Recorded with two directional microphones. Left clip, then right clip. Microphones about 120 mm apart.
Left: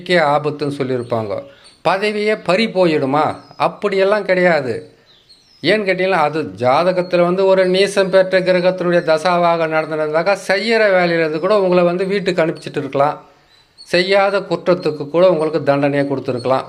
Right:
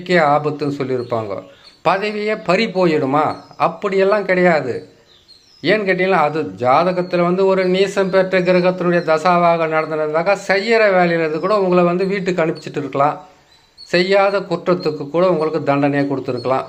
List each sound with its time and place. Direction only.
0.0 s a man's voice: 25° left (ahead or behind)